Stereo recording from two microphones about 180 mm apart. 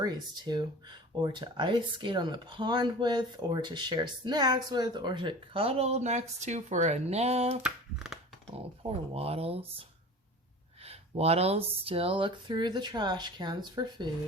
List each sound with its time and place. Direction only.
0.0 s speech: 25° right (ahead or behind)
7.6 s speech: 5° right (ahead or behind)
9.1 s speech: 35° right (ahead or behind)
10.8 s speech: 35° right (ahead or behind)